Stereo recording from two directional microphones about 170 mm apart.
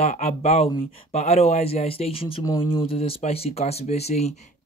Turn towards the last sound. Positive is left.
turn(degrees=40)  # may be behind; listen again after turning